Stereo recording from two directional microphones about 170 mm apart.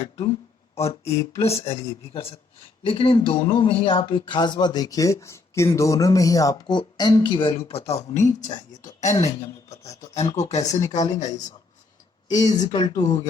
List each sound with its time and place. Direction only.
0.8 s speech: 35° left (ahead or behind)
12.3 s speech: 25° left (ahead or behind)